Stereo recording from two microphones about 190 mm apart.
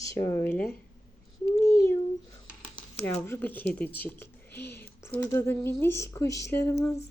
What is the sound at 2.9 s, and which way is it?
Speech, 15° left (ahead or behind).